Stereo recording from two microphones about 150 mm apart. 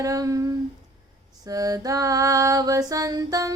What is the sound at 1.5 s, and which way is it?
Female singing, 25° right (ahead or behind).